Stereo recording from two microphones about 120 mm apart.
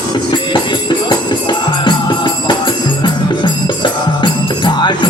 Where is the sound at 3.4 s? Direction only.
40° left (ahead or behind).